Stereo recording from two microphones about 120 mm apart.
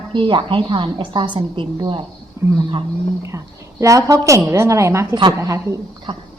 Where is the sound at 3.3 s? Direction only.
25° right (ahead or behind).